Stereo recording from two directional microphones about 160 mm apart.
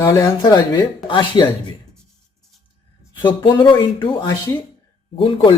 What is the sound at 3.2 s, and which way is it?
Speech, 30° left (ahead or behind).